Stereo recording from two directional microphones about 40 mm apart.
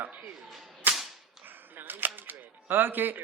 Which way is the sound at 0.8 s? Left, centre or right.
Right.